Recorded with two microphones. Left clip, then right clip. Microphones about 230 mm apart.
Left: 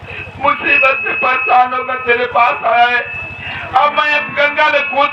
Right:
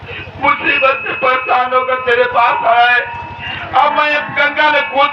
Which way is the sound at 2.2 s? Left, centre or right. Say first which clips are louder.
Right 1 dB; centre.